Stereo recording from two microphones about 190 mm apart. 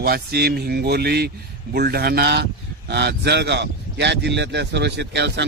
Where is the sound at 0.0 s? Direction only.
55° right (ahead or behind).